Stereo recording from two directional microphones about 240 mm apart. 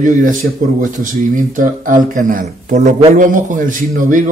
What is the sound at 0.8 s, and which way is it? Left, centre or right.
Speech, right.